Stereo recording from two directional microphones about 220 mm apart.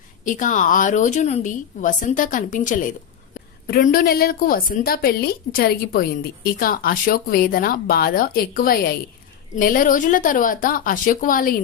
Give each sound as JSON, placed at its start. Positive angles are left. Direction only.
{"t": 0.3, "sound": "a woman's voice", "side_deg": 35}